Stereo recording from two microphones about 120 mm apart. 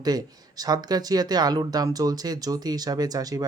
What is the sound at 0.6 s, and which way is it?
Speech, 35° right (ahead or behind).